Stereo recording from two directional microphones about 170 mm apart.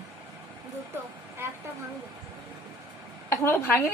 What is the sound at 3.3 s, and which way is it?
Speech, 15° left (ahead or behind).